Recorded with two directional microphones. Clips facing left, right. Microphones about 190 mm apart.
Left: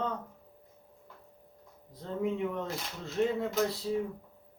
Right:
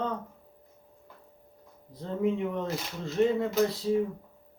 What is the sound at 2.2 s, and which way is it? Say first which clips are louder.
Speech: right 3 dB; centre (ahead or behind).